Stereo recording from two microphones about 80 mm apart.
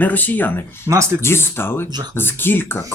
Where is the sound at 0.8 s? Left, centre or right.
Right.